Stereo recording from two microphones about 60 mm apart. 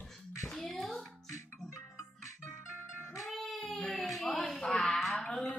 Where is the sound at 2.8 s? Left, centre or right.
Left.